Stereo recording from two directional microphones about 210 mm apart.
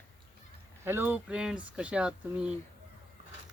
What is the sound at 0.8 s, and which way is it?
Speech, 10° right (ahead or behind).